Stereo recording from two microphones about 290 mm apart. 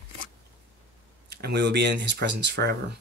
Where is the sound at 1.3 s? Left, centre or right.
Right.